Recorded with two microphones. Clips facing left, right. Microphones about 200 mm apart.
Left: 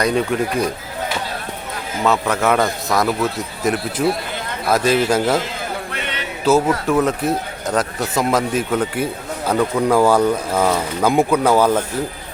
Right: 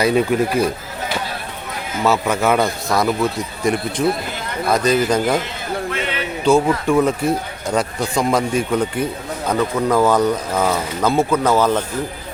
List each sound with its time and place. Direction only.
0.0 s a man's voice: 5° right (ahead or behind)
2.0 s a man's voice: centre (ahead or behind)
6.4 s a man's voice: 5° left (ahead or behind)